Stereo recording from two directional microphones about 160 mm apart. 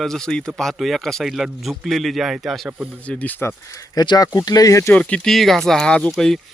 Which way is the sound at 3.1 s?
10° left (ahead or behind).